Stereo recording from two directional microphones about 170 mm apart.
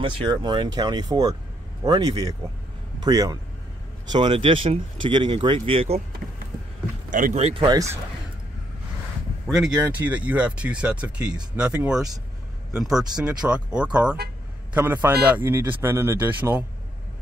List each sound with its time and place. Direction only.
0.0 s a man's voice: 25° right (ahead or behind)
7.1 s speech: 50° right (ahead or behind)
7.4 s speech: 30° right (ahead or behind)
9.5 s speech: centre (ahead or behind)